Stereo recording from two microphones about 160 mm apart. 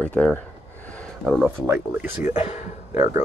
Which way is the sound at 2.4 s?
45° left (ahead or behind).